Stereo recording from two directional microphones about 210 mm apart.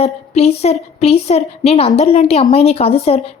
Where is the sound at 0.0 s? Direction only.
30° left (ahead or behind).